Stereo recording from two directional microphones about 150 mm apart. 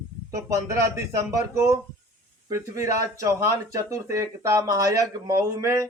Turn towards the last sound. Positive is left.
turn(degrees=-20)  # may be behind; listen again after turning